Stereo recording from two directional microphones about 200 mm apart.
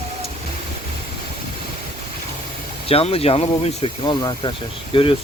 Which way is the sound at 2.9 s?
30° left (ahead or behind).